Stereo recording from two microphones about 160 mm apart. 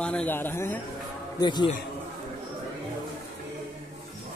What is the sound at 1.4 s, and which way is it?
Speech, 25° left (ahead or behind).